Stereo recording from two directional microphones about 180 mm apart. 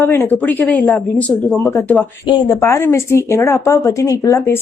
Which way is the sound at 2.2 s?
15° left (ahead or behind).